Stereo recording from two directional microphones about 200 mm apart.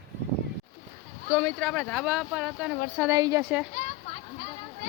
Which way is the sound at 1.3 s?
10° left (ahead or behind).